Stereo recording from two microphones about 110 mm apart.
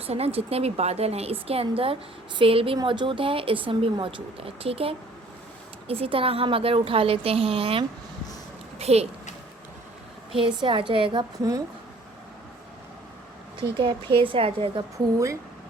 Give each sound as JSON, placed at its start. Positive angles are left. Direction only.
{"t": 0.0, "sound": "a woman's voice", "side_deg": -65}
{"t": 2.7, "sound": "a woman's voice", "side_deg": -45}
{"t": 8.8, "sound": "speech", "side_deg": -70}
{"t": 10.3, "sound": "speech", "side_deg": -50}
{"t": 13.6, "sound": "speech", "side_deg": -50}
{"t": 14.9, "sound": "speech", "side_deg": -30}